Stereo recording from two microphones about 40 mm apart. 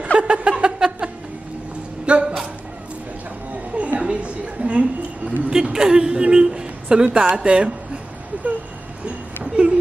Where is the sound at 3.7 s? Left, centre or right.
Right.